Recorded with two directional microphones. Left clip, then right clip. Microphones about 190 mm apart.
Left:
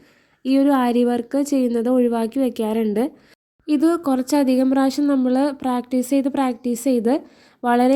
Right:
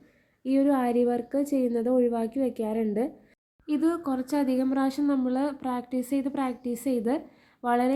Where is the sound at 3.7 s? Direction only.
35° left (ahead or behind).